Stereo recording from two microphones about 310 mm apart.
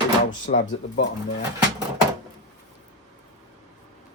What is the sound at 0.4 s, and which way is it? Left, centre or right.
Speech, left.